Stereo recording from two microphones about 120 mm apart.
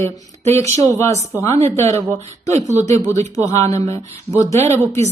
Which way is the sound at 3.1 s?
25° left (ahead or behind).